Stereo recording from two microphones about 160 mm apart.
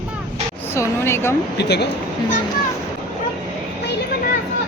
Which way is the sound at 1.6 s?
90° left.